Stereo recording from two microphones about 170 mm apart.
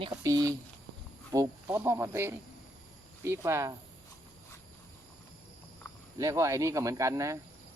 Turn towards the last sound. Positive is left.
turn(degrees=-20)  # may be behind; listen again after turning